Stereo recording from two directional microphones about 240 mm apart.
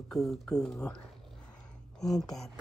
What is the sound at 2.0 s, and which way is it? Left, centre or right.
Speech, centre.